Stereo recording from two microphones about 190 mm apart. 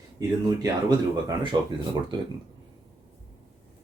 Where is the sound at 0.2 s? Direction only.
20° right (ahead or behind).